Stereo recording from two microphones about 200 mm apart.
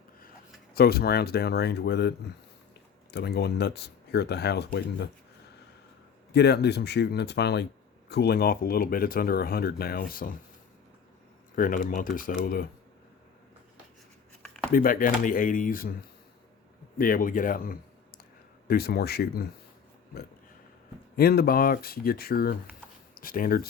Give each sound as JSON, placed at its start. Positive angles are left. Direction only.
{"t": 0.7, "sound": "speech", "side_deg": 50}
{"t": 6.3, "sound": "speech", "side_deg": 55}
{"t": 11.5, "sound": "speech", "side_deg": 40}
{"t": 14.4, "sound": "a sound", "side_deg": 5}
{"t": 14.7, "sound": "speech", "side_deg": 45}
{"t": 17.0, "sound": "speech", "side_deg": 45}
{"t": 21.2, "sound": "speech", "side_deg": 50}